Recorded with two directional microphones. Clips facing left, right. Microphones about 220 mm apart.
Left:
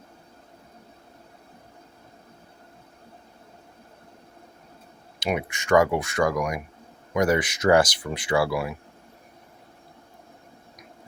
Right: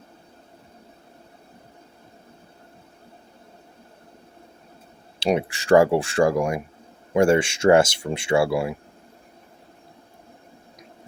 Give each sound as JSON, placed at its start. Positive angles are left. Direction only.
{"t": 5.2, "sound": "speech", "side_deg": -30}